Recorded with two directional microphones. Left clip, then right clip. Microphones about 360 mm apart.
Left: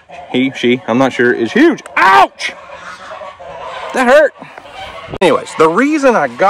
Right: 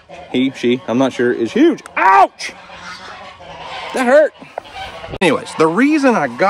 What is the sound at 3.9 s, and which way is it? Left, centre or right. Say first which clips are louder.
Speech: left 3 dB; centre.